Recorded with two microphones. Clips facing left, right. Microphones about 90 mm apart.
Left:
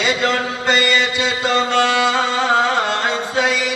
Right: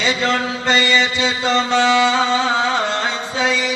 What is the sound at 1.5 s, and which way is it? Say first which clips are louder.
Music: even; 55° left (ahead or behind).